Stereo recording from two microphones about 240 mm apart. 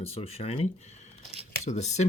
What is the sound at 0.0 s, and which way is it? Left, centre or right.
Speech, left.